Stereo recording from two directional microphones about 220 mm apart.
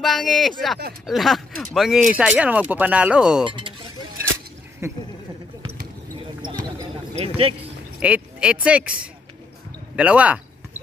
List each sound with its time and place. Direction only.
0.0 s speech: centre (ahead or behind)
4.8 s speech: 10° right (ahead or behind)
6.1 s basketball bounce: 20° right (ahead or behind)
7.2 s speech: 25° right (ahead or behind)
8.0 s speech: 5° right (ahead or behind)